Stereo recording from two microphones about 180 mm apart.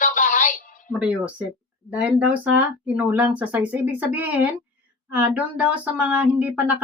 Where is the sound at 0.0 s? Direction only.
45° left (ahead or behind).